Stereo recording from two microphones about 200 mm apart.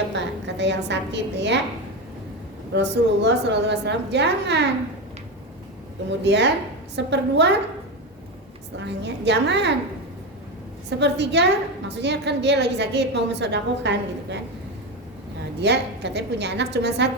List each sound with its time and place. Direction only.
0.1 s a woman's voice: 60° right (ahead or behind)
2.7 s a woman's voice: 60° right (ahead or behind)
6.1 s a woman's voice: 60° right (ahead or behind)
8.8 s a woman's voice: 60° right (ahead or behind)
10.8 s a woman's voice: 60° right (ahead or behind)
15.6 s a woman's voice: 55° right (ahead or behind)